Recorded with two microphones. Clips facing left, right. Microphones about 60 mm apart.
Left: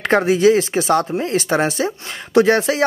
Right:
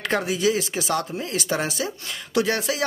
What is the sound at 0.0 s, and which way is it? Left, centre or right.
Speech, left.